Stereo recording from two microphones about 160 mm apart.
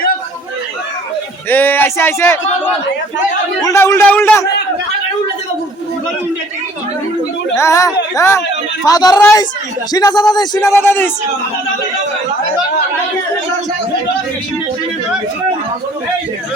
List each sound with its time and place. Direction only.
1.5 s a man's voice: 10° left (ahead or behind)
7.5 s speech: 20° left (ahead or behind)